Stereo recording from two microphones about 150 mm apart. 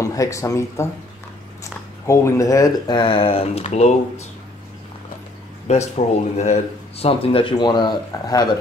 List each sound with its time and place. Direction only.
0.0 s speech: 20° left (ahead or behind); by 4.0 s 50° left (ahead or behind)
5.7 s speech: 45° left (ahead or behind); by 8.5 s 25° left (ahead or behind)